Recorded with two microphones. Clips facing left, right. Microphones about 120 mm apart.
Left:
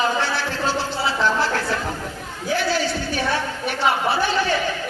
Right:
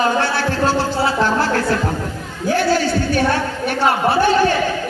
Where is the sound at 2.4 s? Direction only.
50° right (ahead or behind).